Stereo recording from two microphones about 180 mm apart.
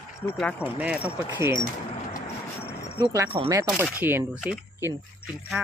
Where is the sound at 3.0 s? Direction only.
15° right (ahead or behind).